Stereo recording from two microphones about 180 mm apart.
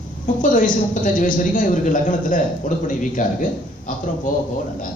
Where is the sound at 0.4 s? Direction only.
45° left (ahead or behind).